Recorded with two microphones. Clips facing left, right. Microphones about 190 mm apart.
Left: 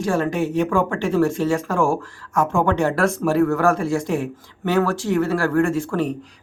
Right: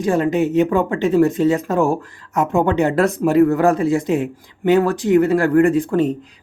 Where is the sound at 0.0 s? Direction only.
20° right (ahead or behind).